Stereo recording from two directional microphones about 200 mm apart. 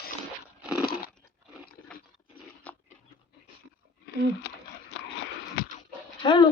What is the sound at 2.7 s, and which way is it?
Biting, 5° left (ahead or behind).